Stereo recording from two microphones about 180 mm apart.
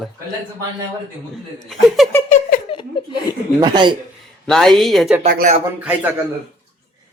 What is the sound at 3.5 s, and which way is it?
Speech, 25° right (ahead or behind).